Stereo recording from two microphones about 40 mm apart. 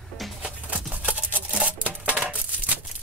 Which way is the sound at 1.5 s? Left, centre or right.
Right.